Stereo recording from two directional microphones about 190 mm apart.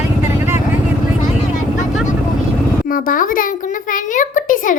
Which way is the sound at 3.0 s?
45° left (ahead or behind).